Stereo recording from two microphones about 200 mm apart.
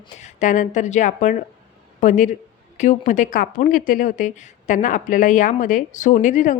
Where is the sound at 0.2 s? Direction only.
40° left (ahead or behind).